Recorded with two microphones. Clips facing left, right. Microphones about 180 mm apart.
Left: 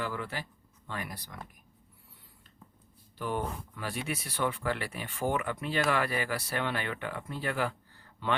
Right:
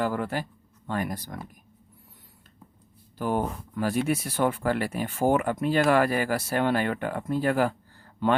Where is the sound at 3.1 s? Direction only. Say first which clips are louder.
Right 6 dB; 45° right (ahead or behind).